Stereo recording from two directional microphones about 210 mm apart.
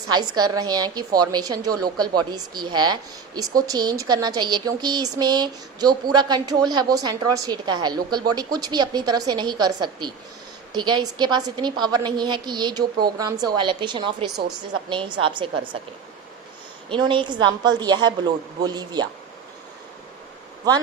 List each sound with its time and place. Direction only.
0.1 s speech: 20° right (ahead or behind)
16.9 s speech: 25° right (ahead or behind)